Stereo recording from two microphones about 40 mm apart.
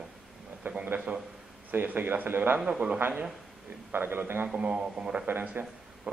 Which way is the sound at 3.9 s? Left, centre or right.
Right.